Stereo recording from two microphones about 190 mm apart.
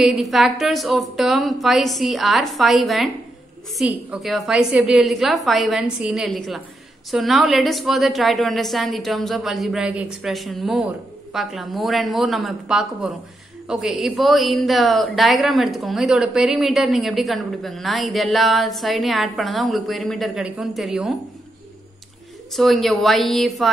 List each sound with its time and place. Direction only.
0.0 s a woman's voice: centre (ahead or behind)
22.5 s a woman's voice: centre (ahead or behind)